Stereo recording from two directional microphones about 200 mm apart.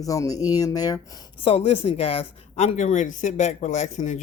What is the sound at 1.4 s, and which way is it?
Speech, 30° left (ahead or behind).